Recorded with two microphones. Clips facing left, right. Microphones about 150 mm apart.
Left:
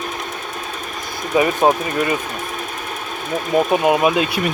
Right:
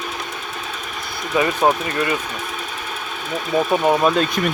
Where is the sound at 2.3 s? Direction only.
40° left (ahead or behind).